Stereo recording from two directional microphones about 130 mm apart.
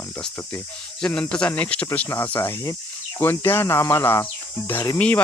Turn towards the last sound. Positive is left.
turn(degrees=20)  # may be behind; listen again after turning